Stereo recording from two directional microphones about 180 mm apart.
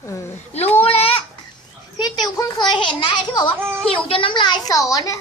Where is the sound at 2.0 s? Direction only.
20° left (ahead or behind).